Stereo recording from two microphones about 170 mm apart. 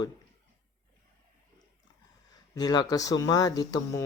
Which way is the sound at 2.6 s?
25° left (ahead or behind).